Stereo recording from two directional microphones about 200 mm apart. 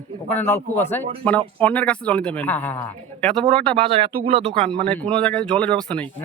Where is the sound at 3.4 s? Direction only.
25° right (ahead or behind).